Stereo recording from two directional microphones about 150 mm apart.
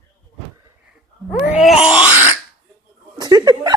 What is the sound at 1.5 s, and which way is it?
Groan, 5° right (ahead or behind).